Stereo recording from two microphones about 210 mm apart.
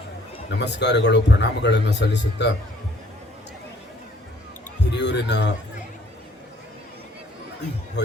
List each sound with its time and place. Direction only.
0.5 s a man's voice: 55° left (ahead or behind)
4.9 s a sound: 55° left (ahead or behind)
8.0 s a man's voice: 55° left (ahead or behind)